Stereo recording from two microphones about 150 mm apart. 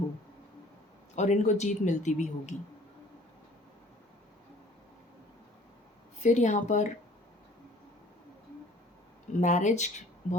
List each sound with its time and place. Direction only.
1.1 s speech: 50° left (ahead or behind)
6.2 s speech: 50° left (ahead or behind)
9.4 s speech: 55° left (ahead or behind)